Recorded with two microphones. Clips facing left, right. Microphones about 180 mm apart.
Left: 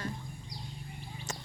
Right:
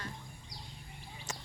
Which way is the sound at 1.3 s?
10° right (ahead or behind).